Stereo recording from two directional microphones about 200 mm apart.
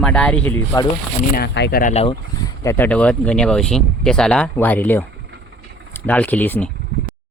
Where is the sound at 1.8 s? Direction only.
30° left (ahead or behind).